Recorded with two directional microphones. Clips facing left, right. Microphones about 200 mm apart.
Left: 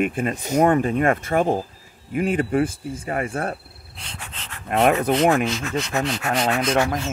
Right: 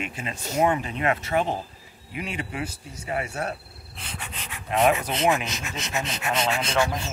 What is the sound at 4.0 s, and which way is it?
Pant, 5° right (ahead or behind).